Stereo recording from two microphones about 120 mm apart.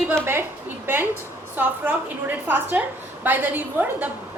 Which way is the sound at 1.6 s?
15° right (ahead or behind).